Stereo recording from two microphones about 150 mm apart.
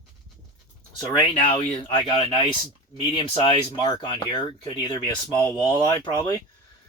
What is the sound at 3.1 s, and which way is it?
Speech, 35° left (ahead or behind).